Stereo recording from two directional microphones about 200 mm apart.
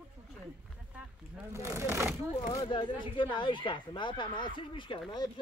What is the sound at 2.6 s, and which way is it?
Speech, 25° left (ahead or behind).